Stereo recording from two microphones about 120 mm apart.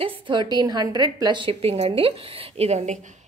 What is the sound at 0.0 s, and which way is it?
A woman's voice, 40° right (ahead or behind).